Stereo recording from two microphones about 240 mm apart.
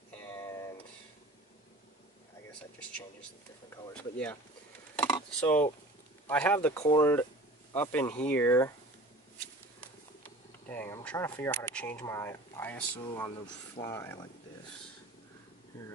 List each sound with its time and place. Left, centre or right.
3.7 s speech: centre
4.9 s a sound: centre
6.2 s speech: centre
10.7 s speech: centre
12.9 s speech: centre